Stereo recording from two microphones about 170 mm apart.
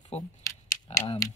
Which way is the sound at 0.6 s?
25° left (ahead or behind).